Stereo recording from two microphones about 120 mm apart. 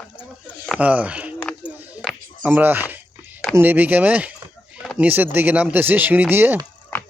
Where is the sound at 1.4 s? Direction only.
10° left (ahead or behind).